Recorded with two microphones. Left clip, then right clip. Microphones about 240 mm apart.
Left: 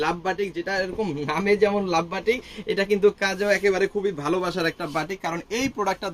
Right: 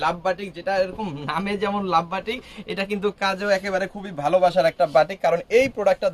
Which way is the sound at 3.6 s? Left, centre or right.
Right.